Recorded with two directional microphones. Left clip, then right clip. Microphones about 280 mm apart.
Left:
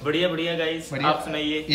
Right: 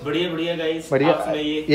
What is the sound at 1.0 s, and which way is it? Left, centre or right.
Speech, centre.